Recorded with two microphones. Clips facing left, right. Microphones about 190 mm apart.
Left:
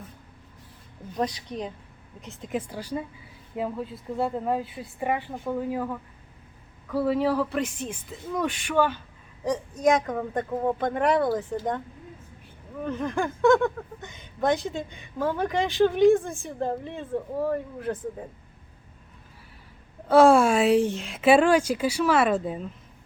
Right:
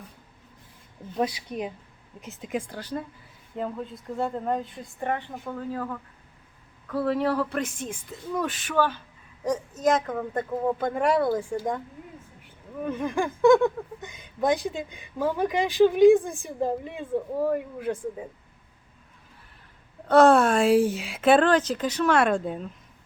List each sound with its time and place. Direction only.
1.2 s speech: 10° right (ahead or behind)
7.8 s speech: 10° right (ahead or behind)
8.4 s speech: 10° left (ahead or behind)
9.4 s speech: 10° right (ahead or behind)
12.8 s speech: 10° right (ahead or behind)
14.1 s speech: centre (ahead or behind)
16.1 s speech: 15° right (ahead or behind)
20.1 s speech: 5° left (ahead or behind)